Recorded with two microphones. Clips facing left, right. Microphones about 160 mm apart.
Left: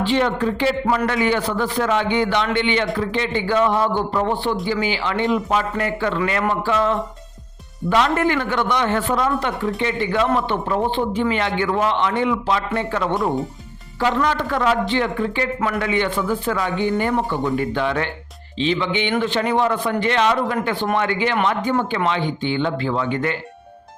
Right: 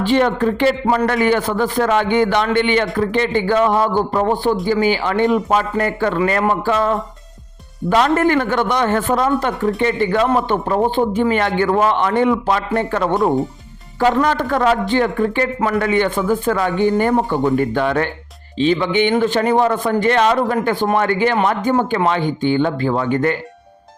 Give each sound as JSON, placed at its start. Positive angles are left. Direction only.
{"t": 0.0, "sound": "a man's voice", "side_deg": -45}